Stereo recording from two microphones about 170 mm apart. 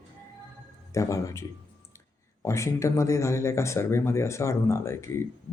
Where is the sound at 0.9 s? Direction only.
20° left (ahead or behind).